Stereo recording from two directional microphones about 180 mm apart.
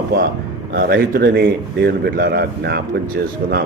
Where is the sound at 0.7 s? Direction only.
70° right (ahead or behind).